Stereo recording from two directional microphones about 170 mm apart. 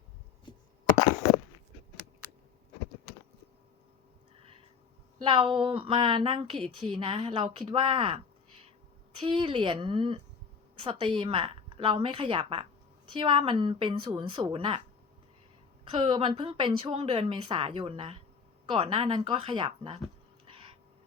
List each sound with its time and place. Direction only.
5.2 s a woman's voice: 30° right (ahead or behind)
9.2 s a woman's voice: 30° right (ahead or behind)
15.8 s a woman's voice: 30° right (ahead or behind)